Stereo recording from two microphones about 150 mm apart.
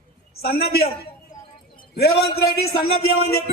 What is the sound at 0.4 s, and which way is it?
Speech, 90° left.